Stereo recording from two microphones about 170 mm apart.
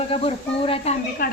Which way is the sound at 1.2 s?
55° left (ahead or behind).